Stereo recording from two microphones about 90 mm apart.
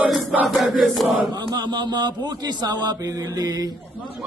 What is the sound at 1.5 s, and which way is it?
Mantra, 50° right (ahead or behind).